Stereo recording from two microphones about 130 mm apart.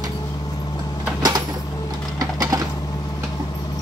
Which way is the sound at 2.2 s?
25° right (ahead or behind).